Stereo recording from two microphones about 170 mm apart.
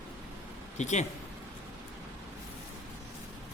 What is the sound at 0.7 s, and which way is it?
Speech, 45° left (ahead or behind).